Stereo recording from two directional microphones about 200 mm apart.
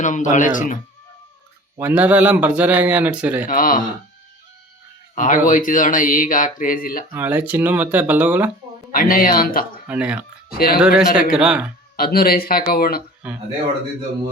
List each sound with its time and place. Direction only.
0.0 s speech: 40° left (ahead or behind)
1.8 s a man's voice: 10° right (ahead or behind)
3.4 s speech: 45° left (ahead or behind)
5.1 s speech: 40° left (ahead or behind)
7.1 s a man's voice: 10° right (ahead or behind)
8.9 s speech: 45° left (ahead or behind)
9.8 s speech: 5° right (ahead or behind)
11.9 s speech: 50° left (ahead or behind)
13.2 s speech: 5° right (ahead or behind)